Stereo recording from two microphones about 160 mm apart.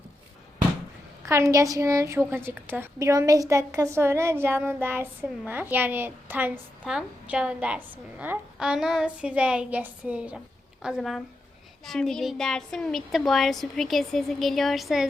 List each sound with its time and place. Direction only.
1.2 s a woman's voice: 20° right (ahead or behind); by 15.0 s centre (ahead or behind)